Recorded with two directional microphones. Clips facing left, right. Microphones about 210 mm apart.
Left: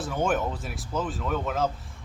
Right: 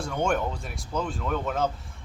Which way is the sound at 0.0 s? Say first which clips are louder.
Even; 5° left (ahead or behind).